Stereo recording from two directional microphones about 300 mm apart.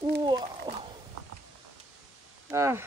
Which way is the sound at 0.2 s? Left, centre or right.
Centre.